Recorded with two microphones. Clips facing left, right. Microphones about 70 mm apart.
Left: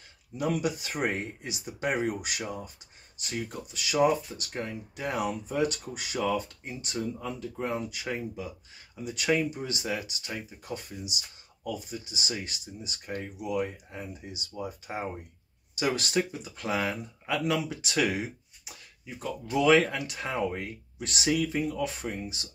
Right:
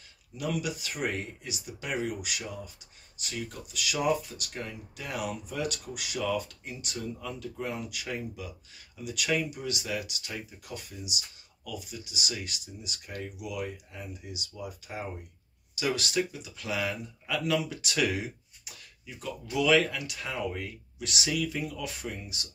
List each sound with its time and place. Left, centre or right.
0.4 s speech: left